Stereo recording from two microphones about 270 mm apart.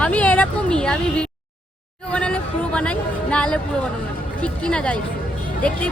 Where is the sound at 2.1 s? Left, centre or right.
Centre.